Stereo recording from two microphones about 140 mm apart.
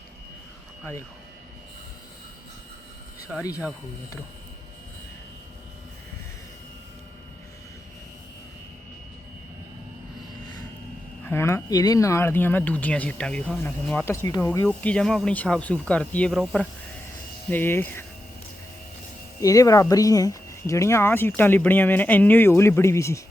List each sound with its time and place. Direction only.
11.2 s speech: 15° left (ahead or behind)
14.0 s speech: 20° left (ahead or behind)
14.7 s speech: 10° left (ahead or behind)
16.4 s speech: centre (ahead or behind)
17.5 s speech: 15° left (ahead or behind)
19.4 s speech: 25° left (ahead or behind)